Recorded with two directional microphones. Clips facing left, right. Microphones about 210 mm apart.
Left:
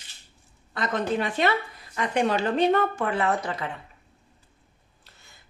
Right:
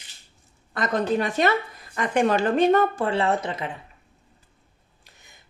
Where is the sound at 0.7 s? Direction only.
40° right (ahead or behind); by 3.7 s 20° right (ahead or behind).